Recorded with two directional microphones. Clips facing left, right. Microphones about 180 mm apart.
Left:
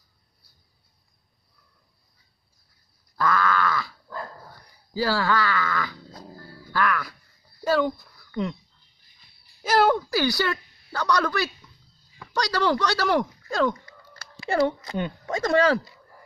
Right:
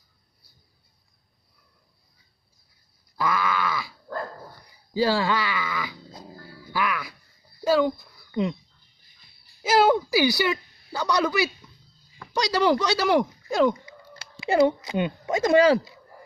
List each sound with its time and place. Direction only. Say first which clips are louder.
3.2 s groan: left 2 dB; 10° right (ahead or behind)
4.9 s wail: right 1 dB; 20° right (ahead or behind)
7.6 s speech: right 2 dB; 5° right (ahead or behind)
8.3 s speech: right 3 dB; 15° right (ahead or behind)
9.6 s a sound: right 1 dB; 5° right (ahead or behind)
12.4 s speech: right 2 dB; 10° right (ahead or behind)